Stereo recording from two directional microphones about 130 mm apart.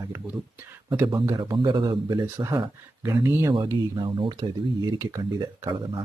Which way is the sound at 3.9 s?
40° right (ahead or behind).